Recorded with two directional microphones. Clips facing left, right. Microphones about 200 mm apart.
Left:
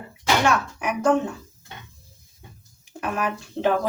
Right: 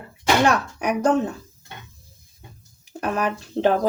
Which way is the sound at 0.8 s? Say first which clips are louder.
Right 1 dB; 40° right (ahead or behind).